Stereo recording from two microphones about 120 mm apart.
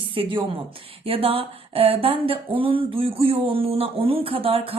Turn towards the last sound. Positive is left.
turn(degrees=-50)  # may be behind; listen again after turning